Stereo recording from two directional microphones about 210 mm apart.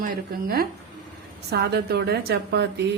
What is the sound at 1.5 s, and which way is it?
Speech, 50° right (ahead or behind).